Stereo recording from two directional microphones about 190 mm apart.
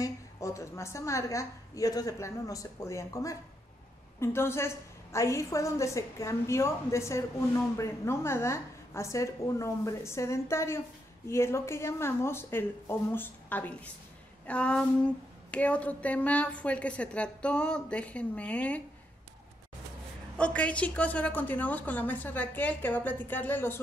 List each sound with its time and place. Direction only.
0.0 s a woman's voice: 15° left (ahead or behind)
20.3 s a woman's voice: 5° left (ahead or behind)